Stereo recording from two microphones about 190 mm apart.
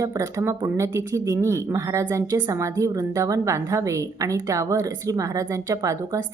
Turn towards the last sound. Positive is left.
turn(degrees=-15)  # may be behind; listen again after turning